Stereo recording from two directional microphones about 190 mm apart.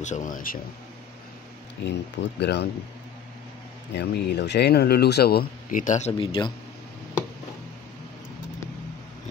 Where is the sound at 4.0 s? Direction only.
60° left (ahead or behind); by 6.1 s 40° left (ahead or behind).